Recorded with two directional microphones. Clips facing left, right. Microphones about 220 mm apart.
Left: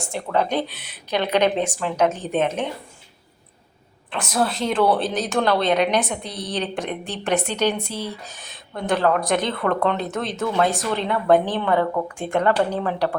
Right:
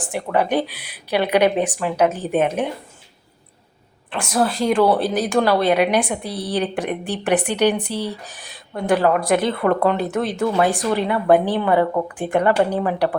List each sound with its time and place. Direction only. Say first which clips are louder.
0.0 s speech: right 2 dB; 15° right (ahead or behind)
4.1 s speech: right 3 dB; 5° right (ahead or behind)